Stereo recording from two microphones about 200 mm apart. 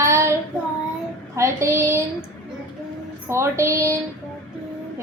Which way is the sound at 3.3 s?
15° right (ahead or behind).